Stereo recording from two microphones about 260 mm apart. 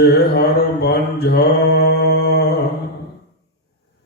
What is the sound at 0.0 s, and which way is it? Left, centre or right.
Mantra, left.